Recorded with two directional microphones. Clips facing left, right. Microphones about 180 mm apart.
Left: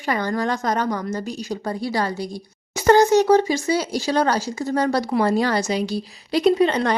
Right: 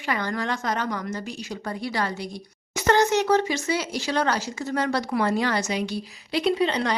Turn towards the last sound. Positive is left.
turn(degrees=50)  # may be behind; listen again after turning